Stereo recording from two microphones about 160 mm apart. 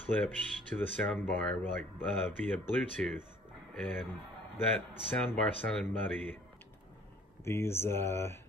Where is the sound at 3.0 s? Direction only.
5° left (ahead or behind).